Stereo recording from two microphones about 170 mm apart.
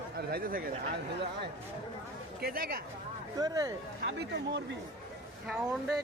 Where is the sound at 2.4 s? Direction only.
60° right (ahead or behind).